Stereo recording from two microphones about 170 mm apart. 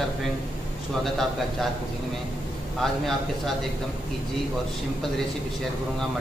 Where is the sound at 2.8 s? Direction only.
Centre (ahead or behind).